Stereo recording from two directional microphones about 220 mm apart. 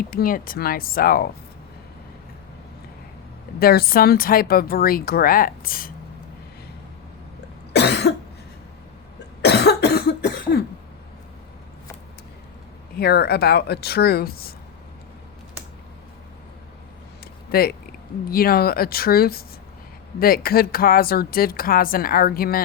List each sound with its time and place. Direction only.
0.1 s speech: 40° left (ahead or behind)
3.6 s speech: 45° left (ahead or behind)
7.7 s cough: 50° left (ahead or behind)
9.4 s cough: 50° left (ahead or behind)
13.0 s speech: 45° left (ahead or behind)
17.5 s speech: 45° left (ahead or behind)